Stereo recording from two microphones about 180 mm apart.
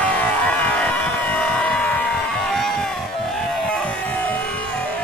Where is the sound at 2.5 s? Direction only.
Centre (ahead or behind).